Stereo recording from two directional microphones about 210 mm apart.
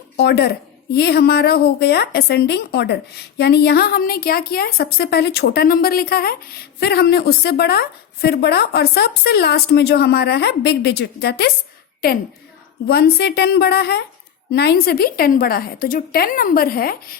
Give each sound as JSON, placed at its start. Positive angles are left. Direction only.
{"t": 0.2, "sound": "a woman's voice", "side_deg": 50}
{"t": 12.9, "sound": "a woman's voice", "side_deg": 50}